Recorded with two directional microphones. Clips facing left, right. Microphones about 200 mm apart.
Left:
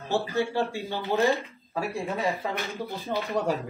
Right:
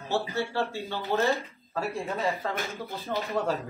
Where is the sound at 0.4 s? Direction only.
15° left (ahead or behind).